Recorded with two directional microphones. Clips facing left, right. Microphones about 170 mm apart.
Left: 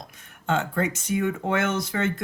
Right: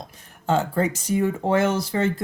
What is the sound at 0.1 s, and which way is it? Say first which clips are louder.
Speech: right 3 dB; 35° right (ahead or behind).